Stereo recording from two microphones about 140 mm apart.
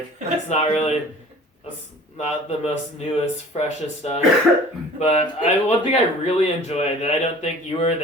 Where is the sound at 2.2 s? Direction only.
50° left (ahead or behind).